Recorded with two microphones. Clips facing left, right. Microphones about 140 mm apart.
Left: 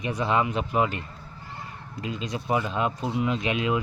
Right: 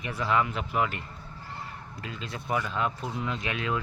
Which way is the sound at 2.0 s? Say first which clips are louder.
Left 7 dB; 15° left (ahead or behind).